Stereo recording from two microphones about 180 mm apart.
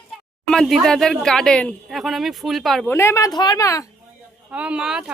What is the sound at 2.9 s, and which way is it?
Speech, 15° left (ahead or behind).